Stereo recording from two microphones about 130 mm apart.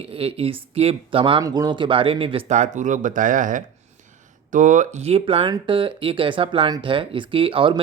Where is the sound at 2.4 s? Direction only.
65° right (ahead or behind); by 3.6 s 90° right.